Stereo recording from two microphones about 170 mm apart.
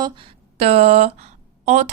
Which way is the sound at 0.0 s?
35° right (ahead or behind).